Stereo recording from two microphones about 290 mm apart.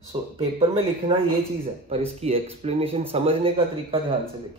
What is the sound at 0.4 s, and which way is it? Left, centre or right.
Speech, centre.